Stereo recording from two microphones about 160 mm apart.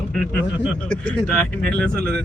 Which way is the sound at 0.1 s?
5° left (ahead or behind).